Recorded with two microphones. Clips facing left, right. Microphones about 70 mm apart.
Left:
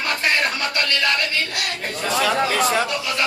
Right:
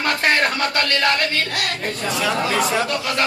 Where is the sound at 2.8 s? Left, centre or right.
Right.